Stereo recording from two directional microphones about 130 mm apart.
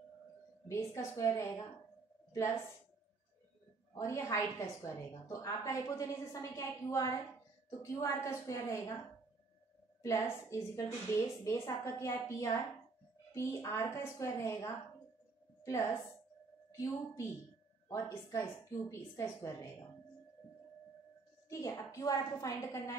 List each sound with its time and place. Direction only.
0.7 s a woman's voice: 20° left (ahead or behind)
3.9 s a woman's voice: 20° left (ahead or behind)
10.0 s a woman's voice: 20° left (ahead or behind)
21.5 s a woman's voice: 25° left (ahead or behind)